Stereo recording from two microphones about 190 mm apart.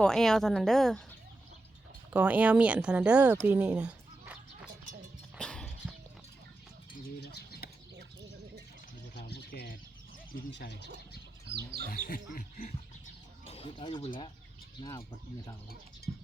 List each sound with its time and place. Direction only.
0.0 s a woman's voice: 5° left (ahead or behind)
2.1 s speech: 10° right (ahead or behind)
3.4 s a sound: 5° right (ahead or behind)
5.4 s horse: 5° left (ahead or behind)
7.2 s bird: 60° left (ahead or behind)
9.1 s bird: 60° left (ahead or behind)
10.6 s speech: 65° left (ahead or behind)
11.4 s speech: 60° right (ahead or behind)
11.9 s speech: 50° left (ahead or behind)
13.5 s speech: 30° left (ahead or behind)
16.1 s a sound: 30° right (ahead or behind)